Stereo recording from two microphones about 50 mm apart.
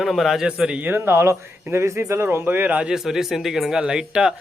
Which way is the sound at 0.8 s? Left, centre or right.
Right.